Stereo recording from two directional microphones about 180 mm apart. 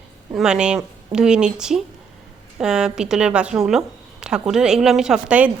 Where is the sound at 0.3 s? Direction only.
5° right (ahead or behind).